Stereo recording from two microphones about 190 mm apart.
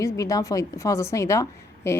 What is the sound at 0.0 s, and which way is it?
A woman's voice, 15° left (ahead or behind).